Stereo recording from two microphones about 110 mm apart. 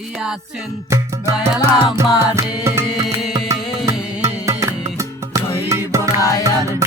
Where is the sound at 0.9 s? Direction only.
25° right (ahead or behind).